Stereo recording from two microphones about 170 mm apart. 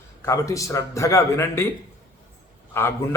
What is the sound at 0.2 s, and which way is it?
A man's voice, 20° left (ahead or behind).